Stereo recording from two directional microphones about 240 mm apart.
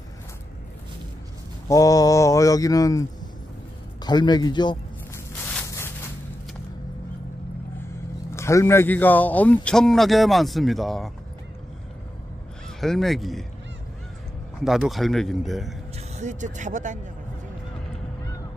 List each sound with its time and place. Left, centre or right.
1.7 s speech: centre
4.0 s a sound: centre
5.5 s a sound: centre
8.3 s a man's voice: centre
12.8 s a man's voice: centre
14.6 s a man's voice: centre
16.2 s speech: right